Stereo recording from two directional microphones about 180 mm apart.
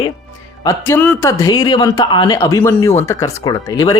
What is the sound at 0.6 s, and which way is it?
Speech, 15° left (ahead or behind).